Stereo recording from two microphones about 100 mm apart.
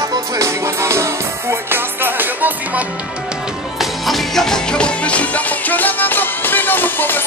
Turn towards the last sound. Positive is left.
turn(degrees=20)  # may be behind; listen again after turning